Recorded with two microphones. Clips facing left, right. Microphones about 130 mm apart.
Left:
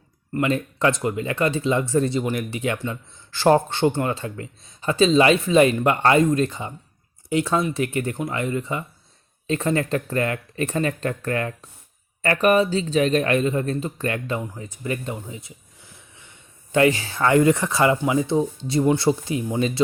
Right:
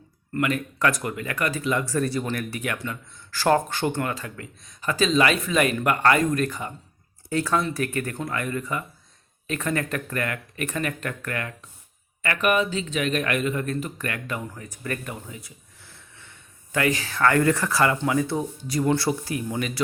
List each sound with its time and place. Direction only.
0.3 s speech: 25° left (ahead or behind)